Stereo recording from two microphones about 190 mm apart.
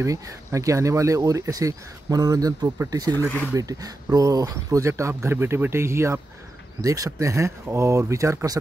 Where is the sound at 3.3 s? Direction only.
10° left (ahead or behind).